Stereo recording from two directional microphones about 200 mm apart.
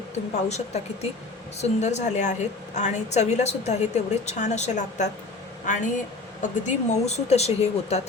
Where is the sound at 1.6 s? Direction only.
35° left (ahead or behind).